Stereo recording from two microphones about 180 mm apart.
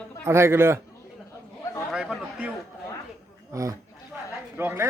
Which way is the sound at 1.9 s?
5° right (ahead or behind).